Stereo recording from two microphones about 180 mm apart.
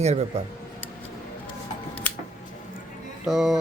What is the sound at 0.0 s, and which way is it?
Speech, 40° right (ahead or behind).